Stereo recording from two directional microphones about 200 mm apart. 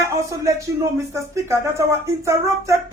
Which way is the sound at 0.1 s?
15° right (ahead or behind).